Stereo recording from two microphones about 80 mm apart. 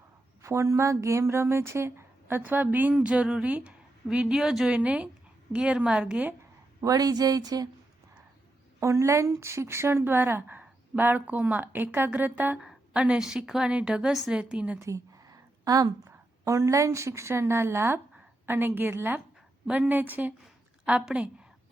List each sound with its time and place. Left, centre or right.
0.4 s a woman's voice: right; by 6.3 s centre
6.8 s speech: right
8.8 s speech: right
12.5 s a woman's voice: centre
14.8 s a sound: right
16.5 s a woman's voice: right; by 21.2 s centre